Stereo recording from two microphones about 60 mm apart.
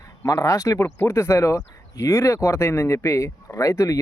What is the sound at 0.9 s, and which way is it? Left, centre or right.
Speech, left.